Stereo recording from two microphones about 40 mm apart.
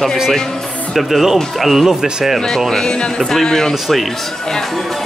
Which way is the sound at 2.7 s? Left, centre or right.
Centre.